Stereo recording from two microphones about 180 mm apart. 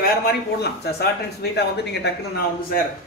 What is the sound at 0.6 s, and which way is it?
Speech, 60° left (ahead or behind).